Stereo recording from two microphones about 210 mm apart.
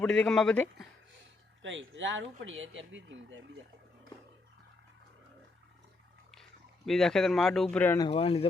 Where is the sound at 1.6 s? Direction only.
65° right (ahead or behind).